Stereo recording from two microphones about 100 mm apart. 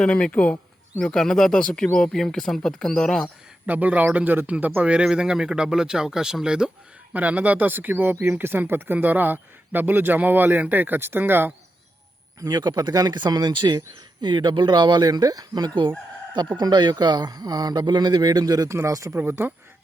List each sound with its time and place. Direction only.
0.0 s speech: 10° left (ahead or behind)
3.7 s a man's voice: 15° right (ahead or behind)
12.4 s speech: 45° right (ahead or behind); by 19.5 s 25° right (ahead or behind)